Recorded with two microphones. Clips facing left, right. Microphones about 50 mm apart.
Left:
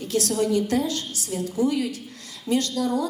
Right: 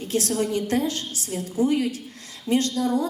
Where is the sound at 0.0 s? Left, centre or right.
Right.